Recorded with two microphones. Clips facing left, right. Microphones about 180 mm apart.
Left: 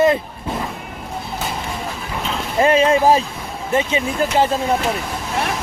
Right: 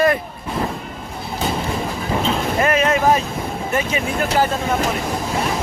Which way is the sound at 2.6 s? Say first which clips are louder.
Left 5 dB; 30° left (ahead or behind).